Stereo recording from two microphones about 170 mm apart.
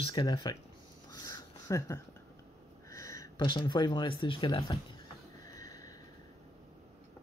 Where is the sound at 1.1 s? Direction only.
20° left (ahead or behind).